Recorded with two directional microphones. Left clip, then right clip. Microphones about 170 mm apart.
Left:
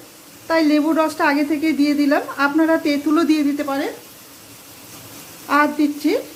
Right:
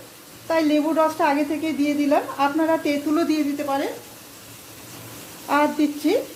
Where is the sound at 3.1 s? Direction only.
35° left (ahead or behind).